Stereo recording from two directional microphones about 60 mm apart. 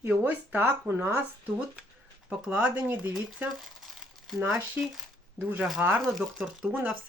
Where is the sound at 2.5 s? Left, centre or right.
Right.